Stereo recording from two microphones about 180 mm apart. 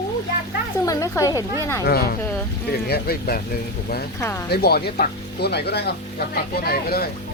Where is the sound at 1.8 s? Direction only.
60° left (ahead or behind).